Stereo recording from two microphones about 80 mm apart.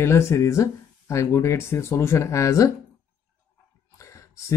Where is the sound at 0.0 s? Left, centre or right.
Left.